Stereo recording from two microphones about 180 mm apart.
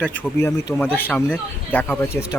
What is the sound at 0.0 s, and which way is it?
A man's voice, 10° left (ahead or behind).